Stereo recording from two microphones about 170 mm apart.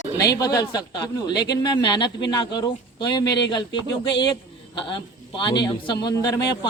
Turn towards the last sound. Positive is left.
turn(degrees=25)  # may be behind; listen again after turning